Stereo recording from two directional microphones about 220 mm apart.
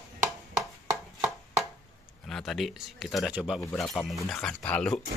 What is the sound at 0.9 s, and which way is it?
Chopping, 15° right (ahead or behind).